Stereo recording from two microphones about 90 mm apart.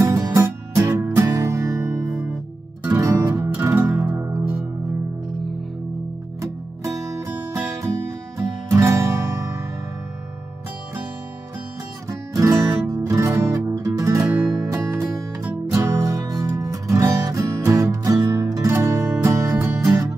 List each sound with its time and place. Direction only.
0.0 s music: 40° right (ahead or behind)
3.4 s music: 25° right (ahead or behind)
6.4 s music: 35° right (ahead or behind)
12.1 s music: 35° right (ahead or behind)